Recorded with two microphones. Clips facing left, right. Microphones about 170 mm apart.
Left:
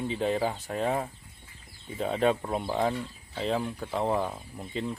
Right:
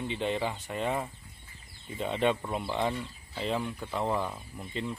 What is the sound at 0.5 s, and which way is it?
Speech, 5° left (ahead or behind).